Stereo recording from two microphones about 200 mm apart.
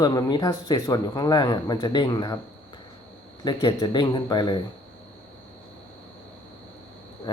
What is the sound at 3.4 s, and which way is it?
Speech, 25° left (ahead or behind).